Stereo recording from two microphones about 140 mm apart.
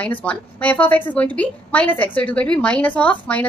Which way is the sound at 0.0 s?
10° left (ahead or behind).